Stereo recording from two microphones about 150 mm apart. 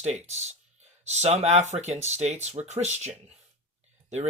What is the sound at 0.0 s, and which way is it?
Speech, 50° right (ahead or behind).